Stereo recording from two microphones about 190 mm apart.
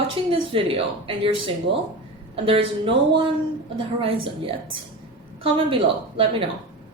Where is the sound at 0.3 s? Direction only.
30° right (ahead or behind).